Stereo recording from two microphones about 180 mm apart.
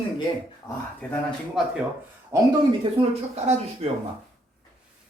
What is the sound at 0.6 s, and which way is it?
Speech, 15° left (ahead or behind).